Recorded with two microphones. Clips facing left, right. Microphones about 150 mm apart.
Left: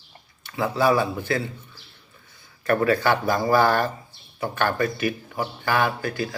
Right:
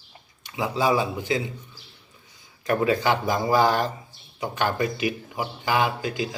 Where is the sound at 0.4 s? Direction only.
15° right (ahead or behind).